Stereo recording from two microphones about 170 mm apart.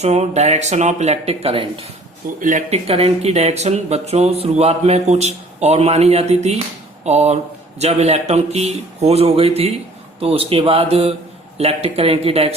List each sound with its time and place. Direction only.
0.0 s speech: 40° right (ahead or behind)
2.4 s speech: 45° right (ahead or behind)